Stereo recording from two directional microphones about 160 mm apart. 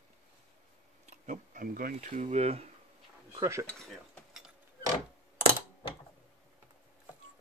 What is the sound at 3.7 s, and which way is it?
Cutlery, centre (ahead or behind).